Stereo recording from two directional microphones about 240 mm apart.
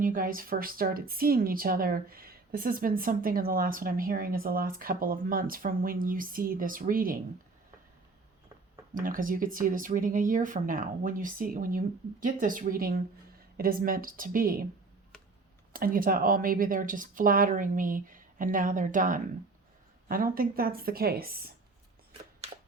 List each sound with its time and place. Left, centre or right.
0.0 s a woman's voice: right
9.0 s a woman's voice: right
15.7 s a woman's voice: right